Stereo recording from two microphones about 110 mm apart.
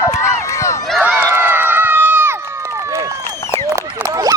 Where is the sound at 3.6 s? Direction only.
25° right (ahead or behind).